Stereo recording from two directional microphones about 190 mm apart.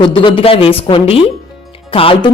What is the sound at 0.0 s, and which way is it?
Speech, 25° left (ahead or behind).